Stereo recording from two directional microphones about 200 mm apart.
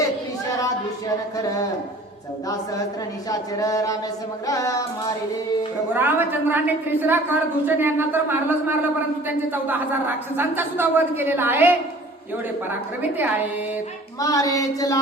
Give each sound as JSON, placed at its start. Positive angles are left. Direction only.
{"t": 1.4, "sound": "child singing", "side_deg": 15}
{"t": 3.2, "sound": "child singing", "side_deg": 20}
{"t": 5.9, "sound": "a woman's voice", "side_deg": -10}
{"t": 14.2, "sound": "child singing", "side_deg": 15}